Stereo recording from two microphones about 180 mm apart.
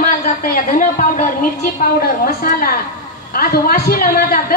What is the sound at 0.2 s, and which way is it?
A woman's voice, 50° left (ahead or behind).